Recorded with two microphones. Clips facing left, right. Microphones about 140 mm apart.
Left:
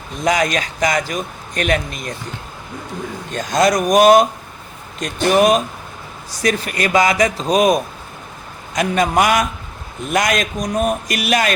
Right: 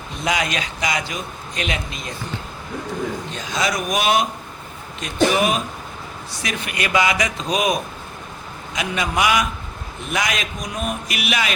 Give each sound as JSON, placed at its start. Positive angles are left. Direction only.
{"t": 0.3, "sound": "a man's voice", "side_deg": 45}
{"t": 3.3, "sound": "a man's voice", "side_deg": 45}